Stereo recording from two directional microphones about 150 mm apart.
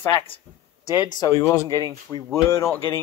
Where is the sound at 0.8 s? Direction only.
25° left (ahead or behind).